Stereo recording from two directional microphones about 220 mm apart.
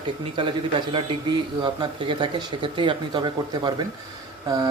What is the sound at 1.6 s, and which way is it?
A man's voice, 20° right (ahead or behind).